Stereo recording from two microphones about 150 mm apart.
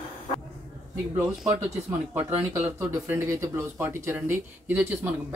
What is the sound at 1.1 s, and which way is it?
Speech, 10° right (ahead or behind).